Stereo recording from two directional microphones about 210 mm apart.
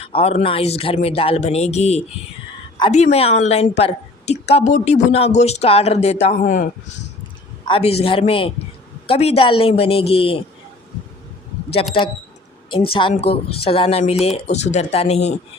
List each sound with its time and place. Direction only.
0.0 s a woman's voice: 25° left (ahead or behind)
7.7 s speech: 30° left (ahead or behind)
12.7 s speech: 25° left (ahead or behind)